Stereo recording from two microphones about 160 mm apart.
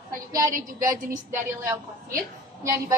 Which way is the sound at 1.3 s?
15° right (ahead or behind).